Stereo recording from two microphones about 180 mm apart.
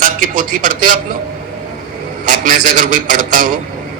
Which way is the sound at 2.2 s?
45° right (ahead or behind).